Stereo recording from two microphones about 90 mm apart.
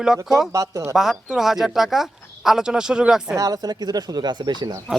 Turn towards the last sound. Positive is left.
turn(degrees=-55)  # may be behind; listen again after turning